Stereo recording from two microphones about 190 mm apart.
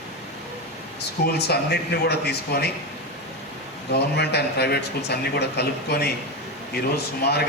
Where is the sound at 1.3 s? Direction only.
60° left (ahead or behind).